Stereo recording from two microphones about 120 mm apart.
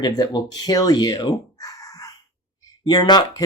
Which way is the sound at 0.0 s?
35° left (ahead or behind).